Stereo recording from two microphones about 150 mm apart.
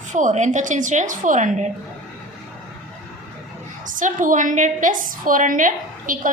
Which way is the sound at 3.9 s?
60° right (ahead or behind).